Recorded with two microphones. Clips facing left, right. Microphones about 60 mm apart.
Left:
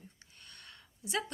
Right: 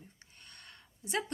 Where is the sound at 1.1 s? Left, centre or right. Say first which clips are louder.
Right 1 dB; right.